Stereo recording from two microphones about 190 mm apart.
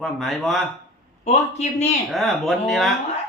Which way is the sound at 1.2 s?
35° left (ahead or behind).